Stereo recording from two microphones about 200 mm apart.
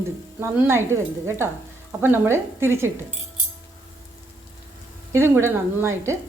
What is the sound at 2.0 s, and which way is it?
Speech, 10° right (ahead or behind).